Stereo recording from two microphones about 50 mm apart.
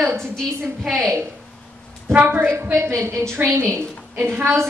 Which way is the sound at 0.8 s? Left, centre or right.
Centre.